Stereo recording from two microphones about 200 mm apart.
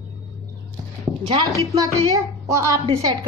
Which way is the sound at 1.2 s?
25° right (ahead or behind).